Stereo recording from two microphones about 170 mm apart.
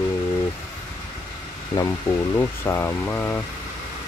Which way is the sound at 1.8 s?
20° left (ahead or behind).